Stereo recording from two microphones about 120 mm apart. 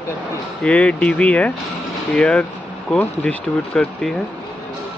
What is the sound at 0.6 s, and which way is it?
Speech, 10° left (ahead or behind).